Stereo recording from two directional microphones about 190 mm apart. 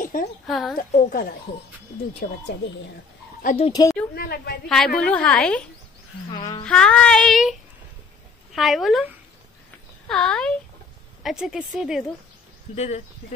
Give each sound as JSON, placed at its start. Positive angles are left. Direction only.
{"t": 0.0, "sound": "a sound", "side_deg": 45}
{"t": 0.5, "sound": "a woman's voice", "side_deg": 0}
{"t": 0.7, "sound": "a woman's voice", "side_deg": 45}
{"t": 3.4, "sound": "speech", "side_deg": 35}
{"t": 4.1, "sound": "a woman's voice", "side_deg": 55}
{"t": 4.6, "sound": "a woman's voice", "side_deg": 5}
{"t": 6.3, "sound": "a sound", "side_deg": 25}
{"t": 6.6, "sound": "a woman's voice", "side_deg": 5}
{"t": 8.5, "sound": "a woman's voice", "side_deg": 0}
{"t": 10.0, "sound": "a woman's voice", "side_deg": 5}
{"t": 12.7, "sound": "speech", "side_deg": 35}